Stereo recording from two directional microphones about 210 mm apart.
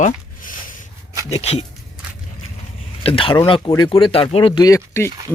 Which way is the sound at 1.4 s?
30° left (ahead or behind).